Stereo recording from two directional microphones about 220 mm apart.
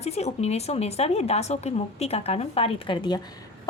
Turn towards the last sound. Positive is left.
turn(degrees=20)  # may be behind; listen again after turning